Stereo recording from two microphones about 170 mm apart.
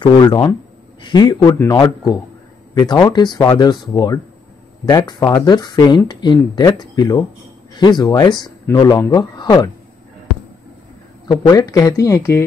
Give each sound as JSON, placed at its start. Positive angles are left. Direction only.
{"t": 0.0, "sound": "speech", "side_deg": 25}
{"t": 11.2, "sound": "speech", "side_deg": 20}